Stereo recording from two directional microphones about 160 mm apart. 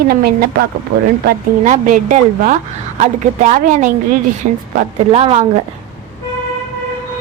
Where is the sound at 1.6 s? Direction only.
55° right (ahead or behind).